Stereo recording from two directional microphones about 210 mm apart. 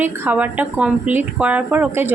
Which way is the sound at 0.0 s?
10° right (ahead or behind).